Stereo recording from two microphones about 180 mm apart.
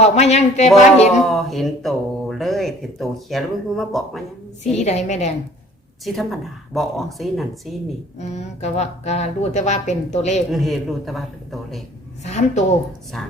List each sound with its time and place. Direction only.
0.0 s a woman's voice: 35° left (ahead or behind)
1.2 s speech: centre (ahead or behind)
4.7 s a woman's voice: 40° left (ahead or behind)
6.1 s speech: centre (ahead or behind)
8.2 s a woman's voice: 40° left (ahead or behind)
10.5 s speech: centre (ahead or behind)
12.2 s a woman's voice: 40° left (ahead or behind)